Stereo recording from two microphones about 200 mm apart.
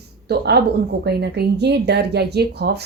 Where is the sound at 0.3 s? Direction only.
55° right (ahead or behind).